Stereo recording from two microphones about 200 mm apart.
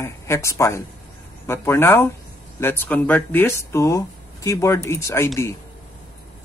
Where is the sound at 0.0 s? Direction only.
15° left (ahead or behind).